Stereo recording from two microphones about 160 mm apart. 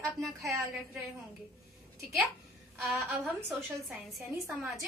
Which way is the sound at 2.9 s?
10° right (ahead or behind).